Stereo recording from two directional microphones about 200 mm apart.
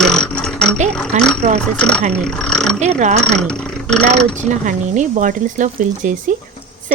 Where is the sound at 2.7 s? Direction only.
35° right (ahead or behind).